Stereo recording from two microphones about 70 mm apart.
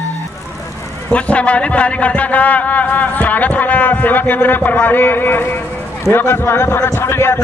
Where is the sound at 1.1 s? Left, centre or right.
Centre.